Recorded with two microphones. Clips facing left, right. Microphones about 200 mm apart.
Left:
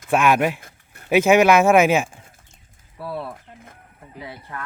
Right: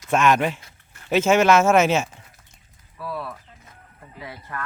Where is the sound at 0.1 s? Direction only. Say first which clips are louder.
Left 1 dB; 10° left (ahead or behind).